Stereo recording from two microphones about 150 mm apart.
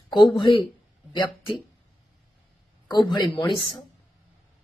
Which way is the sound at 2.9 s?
30° left (ahead or behind).